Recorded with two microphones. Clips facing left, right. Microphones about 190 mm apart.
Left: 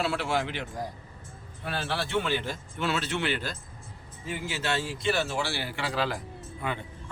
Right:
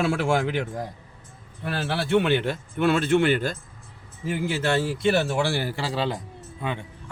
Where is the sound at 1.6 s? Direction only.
60° right (ahead or behind).